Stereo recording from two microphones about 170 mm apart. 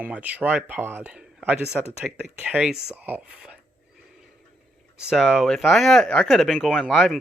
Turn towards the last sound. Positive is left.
turn(degrees=0)  # may be behind; listen again after turning